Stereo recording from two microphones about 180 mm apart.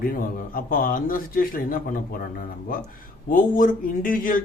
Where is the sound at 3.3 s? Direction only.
50° left (ahead or behind).